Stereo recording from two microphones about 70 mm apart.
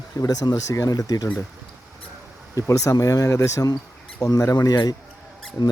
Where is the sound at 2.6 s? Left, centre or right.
Left.